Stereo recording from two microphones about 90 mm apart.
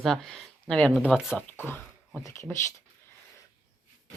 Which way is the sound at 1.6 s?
20° left (ahead or behind).